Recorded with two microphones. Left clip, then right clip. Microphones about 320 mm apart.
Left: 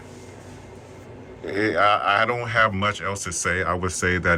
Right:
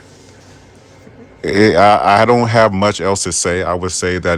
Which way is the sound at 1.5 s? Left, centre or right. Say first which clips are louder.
Right 10 dB; centre.